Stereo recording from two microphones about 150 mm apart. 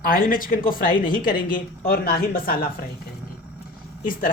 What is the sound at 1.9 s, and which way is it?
Speech, 90° left.